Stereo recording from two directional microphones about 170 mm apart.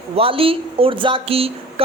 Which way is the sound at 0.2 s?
35° right (ahead or behind).